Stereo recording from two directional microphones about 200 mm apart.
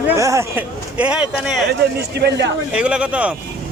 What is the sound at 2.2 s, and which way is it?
Speech, 60° right (ahead or behind).